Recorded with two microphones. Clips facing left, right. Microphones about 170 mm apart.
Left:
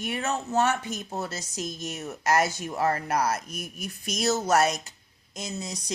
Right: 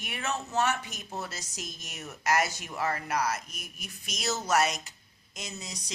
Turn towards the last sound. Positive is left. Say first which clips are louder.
# left 7 dB
turn(degrees=45)  # may be behind; listen again after turning